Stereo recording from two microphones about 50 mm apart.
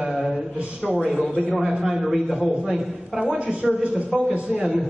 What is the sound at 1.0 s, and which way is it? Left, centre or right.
A woman's voice, centre.